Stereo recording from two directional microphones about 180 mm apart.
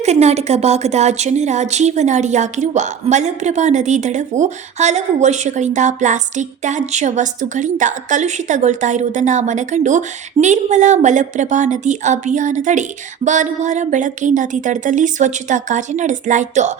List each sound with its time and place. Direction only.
0.0 s a woman's voice: 35° right (ahead or behind)